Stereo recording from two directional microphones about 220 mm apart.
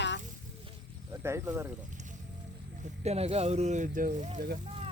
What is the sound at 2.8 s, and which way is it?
Speech, 30° right (ahead or behind).